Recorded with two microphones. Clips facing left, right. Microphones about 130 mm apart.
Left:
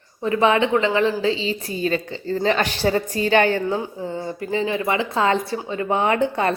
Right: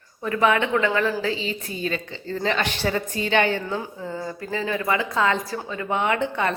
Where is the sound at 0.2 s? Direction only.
25° left (ahead or behind); by 3.8 s 40° left (ahead or behind).